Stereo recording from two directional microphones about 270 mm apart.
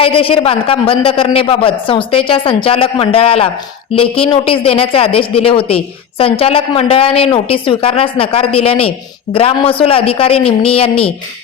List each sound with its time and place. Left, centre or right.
0.0 s speech: centre